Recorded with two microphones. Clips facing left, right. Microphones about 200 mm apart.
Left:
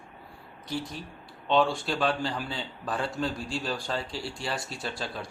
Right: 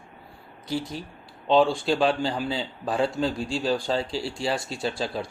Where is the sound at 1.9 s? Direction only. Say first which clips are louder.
Right 5 dB; 30° right (ahead or behind).